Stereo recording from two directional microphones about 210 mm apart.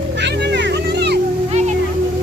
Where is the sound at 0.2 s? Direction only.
55° right (ahead or behind).